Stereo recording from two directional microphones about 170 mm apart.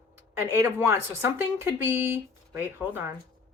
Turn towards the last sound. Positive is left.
turn(degrees=-10)  # may be behind; listen again after turning